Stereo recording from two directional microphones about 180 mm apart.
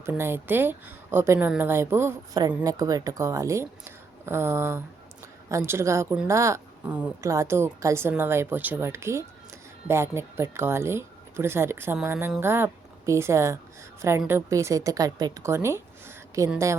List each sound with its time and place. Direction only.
0.0 s speech: 15° right (ahead or behind)